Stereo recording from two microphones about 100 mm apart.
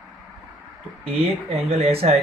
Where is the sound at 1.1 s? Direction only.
90° right.